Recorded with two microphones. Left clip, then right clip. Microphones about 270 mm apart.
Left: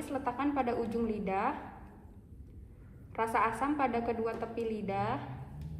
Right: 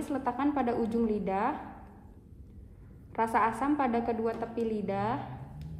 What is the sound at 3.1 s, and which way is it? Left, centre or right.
A woman's voice, right.